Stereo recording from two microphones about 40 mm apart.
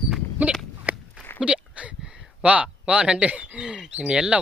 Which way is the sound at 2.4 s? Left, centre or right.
Right.